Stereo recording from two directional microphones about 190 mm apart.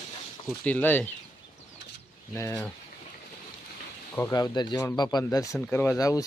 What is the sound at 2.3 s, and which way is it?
Speech, 15° left (ahead or behind).